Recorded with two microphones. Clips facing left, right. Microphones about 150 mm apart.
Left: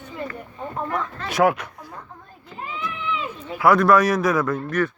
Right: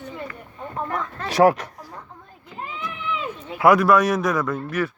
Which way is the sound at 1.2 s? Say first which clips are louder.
Right 3 dB; 35° right (ahead or behind).